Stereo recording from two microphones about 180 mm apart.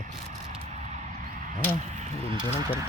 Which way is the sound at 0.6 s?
40° right (ahead or behind).